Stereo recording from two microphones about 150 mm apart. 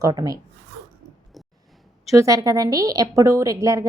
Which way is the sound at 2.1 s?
20° right (ahead or behind).